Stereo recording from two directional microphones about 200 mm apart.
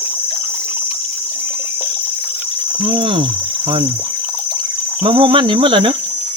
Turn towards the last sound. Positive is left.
turn(degrees=-25)  # may be behind; listen again after turning